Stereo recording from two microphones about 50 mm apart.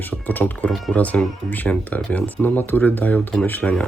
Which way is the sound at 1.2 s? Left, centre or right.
Centre.